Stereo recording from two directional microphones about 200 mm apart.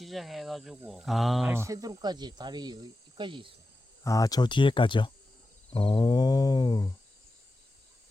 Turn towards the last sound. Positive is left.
turn(degrees=20)  # may be behind; listen again after turning